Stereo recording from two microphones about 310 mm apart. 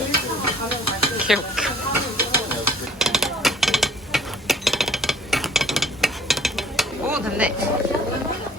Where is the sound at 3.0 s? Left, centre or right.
Centre.